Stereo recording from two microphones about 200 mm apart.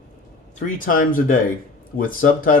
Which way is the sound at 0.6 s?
40° left (ahead or behind).